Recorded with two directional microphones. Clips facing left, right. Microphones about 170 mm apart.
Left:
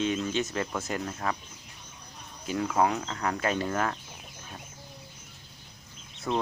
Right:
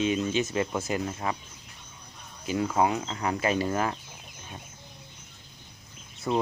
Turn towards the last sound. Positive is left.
turn(degrees=-10)  # may be behind; listen again after turning